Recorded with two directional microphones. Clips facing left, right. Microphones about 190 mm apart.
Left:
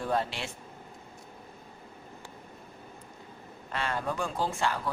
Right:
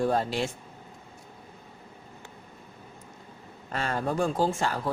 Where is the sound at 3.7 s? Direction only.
40° right (ahead or behind).